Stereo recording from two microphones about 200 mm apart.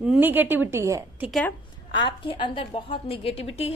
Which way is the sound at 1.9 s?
25° left (ahead or behind).